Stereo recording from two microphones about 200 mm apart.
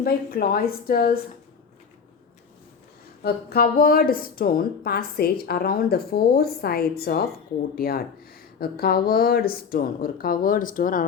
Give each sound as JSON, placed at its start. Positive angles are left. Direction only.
{"t": 0.0, "sound": "a woman's voice", "side_deg": 50}
{"t": 3.2, "sound": "a woman's voice", "side_deg": 50}